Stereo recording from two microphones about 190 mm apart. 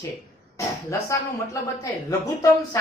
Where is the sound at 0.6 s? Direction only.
15° left (ahead or behind).